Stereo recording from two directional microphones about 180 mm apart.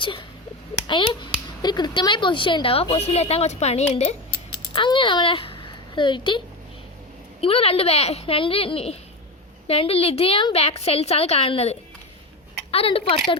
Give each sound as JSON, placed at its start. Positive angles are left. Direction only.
{"t": 0.0, "sound": "a sound", "side_deg": 30}
{"t": 0.9, "sound": "a woman's voice", "side_deg": 25}
{"t": 7.4, "sound": "a woman's voice", "side_deg": 35}